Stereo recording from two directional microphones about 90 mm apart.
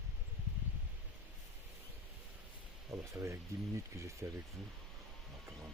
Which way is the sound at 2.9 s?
35° right (ahead or behind).